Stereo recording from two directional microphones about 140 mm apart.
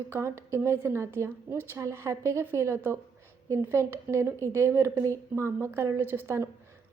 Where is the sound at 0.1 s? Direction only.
20° right (ahead or behind).